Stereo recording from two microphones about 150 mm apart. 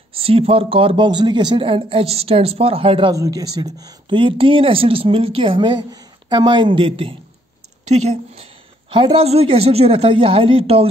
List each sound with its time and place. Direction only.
0.1 s speech: 40° right (ahead or behind)
3.1 s speech: 25° right (ahead or behind)
7.9 s a woman's voice: 50° right (ahead or behind)
8.9 s speech: 35° right (ahead or behind)